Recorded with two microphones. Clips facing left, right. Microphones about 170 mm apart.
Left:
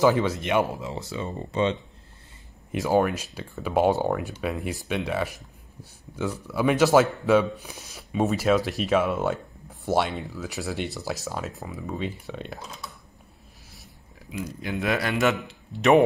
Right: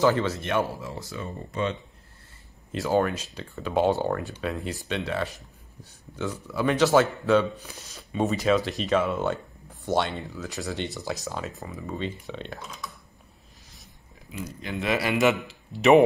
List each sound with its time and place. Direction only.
0.0 s speech: 10° left (ahead or behind); by 1.8 s 25° left (ahead or behind)
2.7 s speech: 10° left (ahead or behind)
6.5 s speech: 10° left (ahead or behind)
14.3 s speech: 5° left (ahead or behind)